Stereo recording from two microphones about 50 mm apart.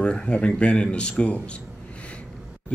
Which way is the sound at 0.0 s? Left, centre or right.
Left.